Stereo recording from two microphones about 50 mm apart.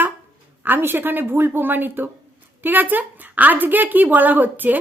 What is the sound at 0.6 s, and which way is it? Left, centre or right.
A woman's voice, right.